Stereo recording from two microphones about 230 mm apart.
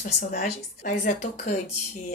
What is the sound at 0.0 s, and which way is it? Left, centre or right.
Speech, left.